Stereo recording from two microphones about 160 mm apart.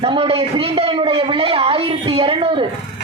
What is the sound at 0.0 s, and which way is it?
A man's voice, 35° right (ahead or behind).